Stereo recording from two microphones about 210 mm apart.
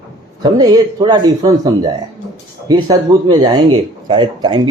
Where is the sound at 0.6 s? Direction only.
20° right (ahead or behind).